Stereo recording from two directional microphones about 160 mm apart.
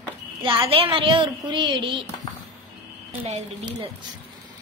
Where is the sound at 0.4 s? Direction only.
30° right (ahead or behind).